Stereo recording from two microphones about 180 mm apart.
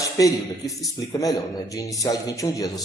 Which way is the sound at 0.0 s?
20° left (ahead or behind).